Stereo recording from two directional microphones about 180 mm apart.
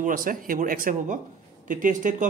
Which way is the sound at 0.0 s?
50° right (ahead or behind).